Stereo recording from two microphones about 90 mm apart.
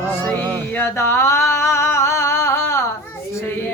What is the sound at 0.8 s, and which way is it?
Singing, 25° left (ahead or behind).